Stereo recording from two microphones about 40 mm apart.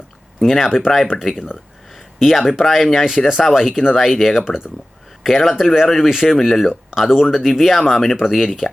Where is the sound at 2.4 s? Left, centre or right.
Centre.